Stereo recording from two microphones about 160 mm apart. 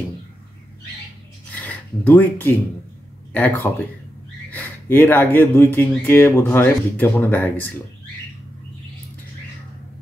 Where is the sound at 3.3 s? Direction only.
10° left (ahead or behind).